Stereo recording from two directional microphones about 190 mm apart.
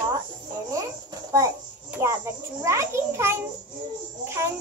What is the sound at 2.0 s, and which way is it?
A child's voice, 10° right (ahead or behind).